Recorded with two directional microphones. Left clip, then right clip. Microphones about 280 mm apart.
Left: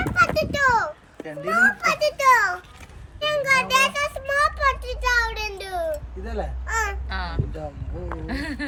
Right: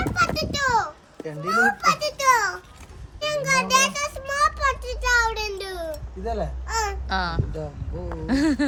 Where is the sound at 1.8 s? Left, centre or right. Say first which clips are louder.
Left 1 dB; centre.